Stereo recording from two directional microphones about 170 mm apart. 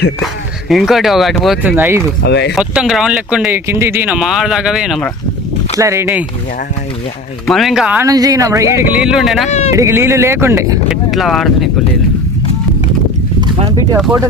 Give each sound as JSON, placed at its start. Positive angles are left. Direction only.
{"t": 0.7, "sound": "speech", "side_deg": 0}
{"t": 2.2, "sound": "speech", "side_deg": 85}
{"t": 2.6, "sound": "speech", "side_deg": 0}
{"t": 5.7, "sound": "speech", "side_deg": -15}
{"t": 7.5, "sound": "speech", "side_deg": 0}
{"t": 8.0, "sound": "speech", "side_deg": -20}
{"t": 9.0, "sound": "speech", "side_deg": -5}
{"t": 9.5, "sound": "speech", "side_deg": 40}
{"t": 9.7, "sound": "speech", "side_deg": -15}
{"t": 11.1, "sound": "speech", "side_deg": 0}